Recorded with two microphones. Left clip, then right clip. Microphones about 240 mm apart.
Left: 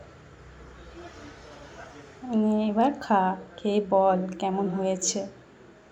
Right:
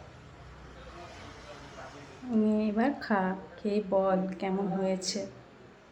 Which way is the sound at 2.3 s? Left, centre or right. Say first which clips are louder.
Left 4 dB; centre.